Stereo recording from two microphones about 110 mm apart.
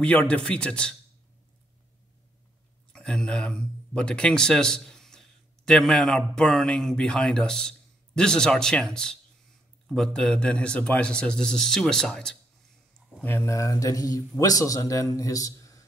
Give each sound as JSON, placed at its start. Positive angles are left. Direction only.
{"t": 0.0, "sound": "a man's voice", "side_deg": 10}
{"t": 2.9, "sound": "a man's voice", "side_deg": 5}
{"t": 13.2, "sound": "speech", "side_deg": 20}